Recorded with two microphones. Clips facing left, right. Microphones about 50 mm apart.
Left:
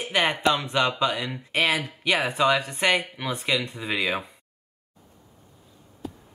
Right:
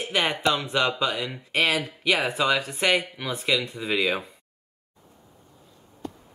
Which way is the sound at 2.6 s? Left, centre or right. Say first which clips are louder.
Even; centre.